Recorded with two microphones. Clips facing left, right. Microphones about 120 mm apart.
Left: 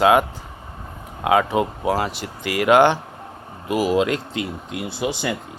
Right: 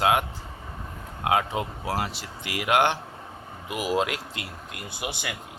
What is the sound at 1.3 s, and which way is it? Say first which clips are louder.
Speech: left 7 dB; 90° left.